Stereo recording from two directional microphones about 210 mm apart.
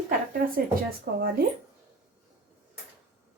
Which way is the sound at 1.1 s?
45° right (ahead or behind).